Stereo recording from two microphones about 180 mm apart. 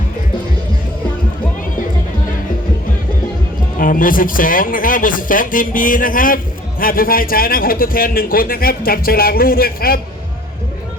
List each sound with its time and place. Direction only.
3.8 s a man's voice: 50° left (ahead or behind)